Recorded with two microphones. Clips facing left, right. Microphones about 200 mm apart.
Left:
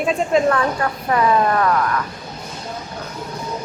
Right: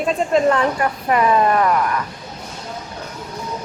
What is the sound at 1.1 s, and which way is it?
Speech, 15° right (ahead or behind).